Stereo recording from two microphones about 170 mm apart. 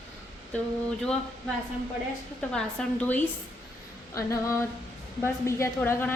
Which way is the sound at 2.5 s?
5° left (ahead or behind).